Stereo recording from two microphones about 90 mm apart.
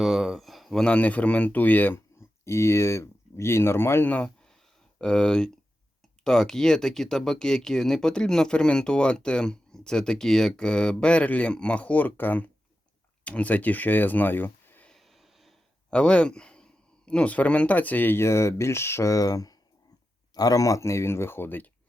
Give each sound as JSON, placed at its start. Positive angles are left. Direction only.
{"t": 0.0, "sound": "speech", "side_deg": 0}
{"t": 2.4, "sound": "speech", "side_deg": 30}
{"t": 4.1, "sound": "a sound", "side_deg": 10}
{"t": 6.2, "sound": "speech", "side_deg": 5}
{"t": 14.8, "sound": "a sound", "side_deg": 0}
{"t": 15.9, "sound": "speech", "side_deg": 10}